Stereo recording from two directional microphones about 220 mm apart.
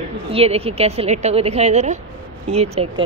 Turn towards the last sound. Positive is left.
turn(degrees=-25)  # may be behind; listen again after turning